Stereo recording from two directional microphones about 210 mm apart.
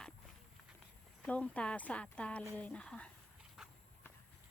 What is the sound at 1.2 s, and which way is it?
Speech, 5° left (ahead or behind).